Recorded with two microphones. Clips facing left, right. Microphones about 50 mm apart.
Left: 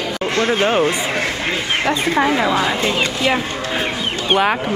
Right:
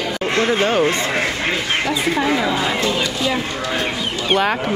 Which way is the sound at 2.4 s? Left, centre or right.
Centre.